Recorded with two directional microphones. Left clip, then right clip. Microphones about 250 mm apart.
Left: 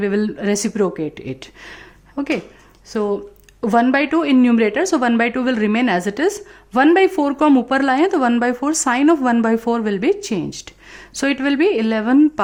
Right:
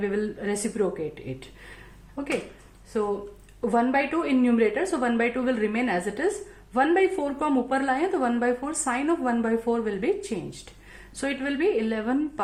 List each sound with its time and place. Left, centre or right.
0.0 s a woman's voice: left
3.6 s a woman's voice: left